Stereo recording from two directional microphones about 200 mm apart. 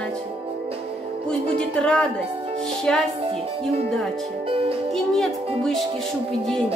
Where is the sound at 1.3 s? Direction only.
5° left (ahead or behind).